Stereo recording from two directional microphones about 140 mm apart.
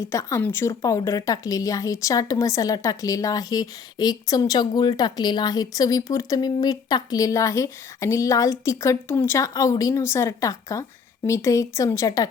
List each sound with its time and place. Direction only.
0.1 s a woman's voice: 20° left (ahead or behind)